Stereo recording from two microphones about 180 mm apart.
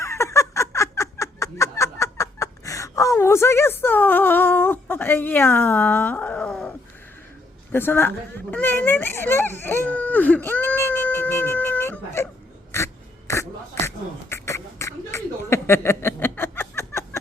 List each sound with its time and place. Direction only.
0.0 s a sound: 15° left (ahead or behind)
7.7 s speech: 10° left (ahead or behind)
12.7 s beatboxing: 15° left (ahead or behind)